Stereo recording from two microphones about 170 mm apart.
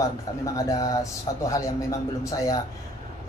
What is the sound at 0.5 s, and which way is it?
A man's voice, 20° left (ahead or behind).